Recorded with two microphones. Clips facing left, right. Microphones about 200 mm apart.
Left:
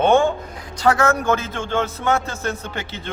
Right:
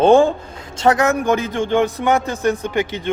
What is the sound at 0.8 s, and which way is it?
A man's voice, 20° right (ahead or behind).